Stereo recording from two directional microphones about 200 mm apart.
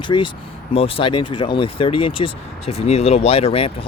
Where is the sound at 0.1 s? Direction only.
25° left (ahead or behind).